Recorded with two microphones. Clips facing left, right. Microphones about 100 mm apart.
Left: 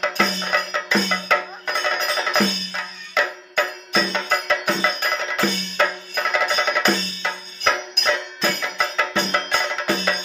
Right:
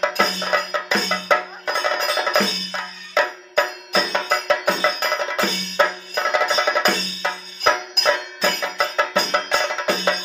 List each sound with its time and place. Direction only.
0.0 s music: 15° right (ahead or behind)